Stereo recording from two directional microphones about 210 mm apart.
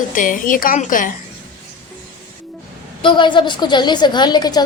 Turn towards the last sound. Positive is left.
turn(degrees=20)  # may be behind; listen again after turning